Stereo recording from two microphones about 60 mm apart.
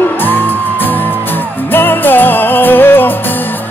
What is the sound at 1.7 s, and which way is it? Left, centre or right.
Music, left.